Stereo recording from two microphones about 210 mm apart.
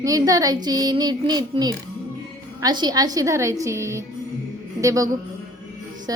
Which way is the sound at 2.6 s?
20° right (ahead or behind).